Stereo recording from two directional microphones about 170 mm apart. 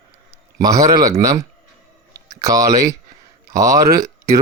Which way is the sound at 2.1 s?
20° right (ahead or behind).